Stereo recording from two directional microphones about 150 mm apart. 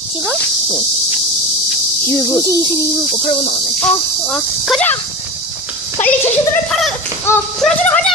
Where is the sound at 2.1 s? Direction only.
20° left (ahead or behind).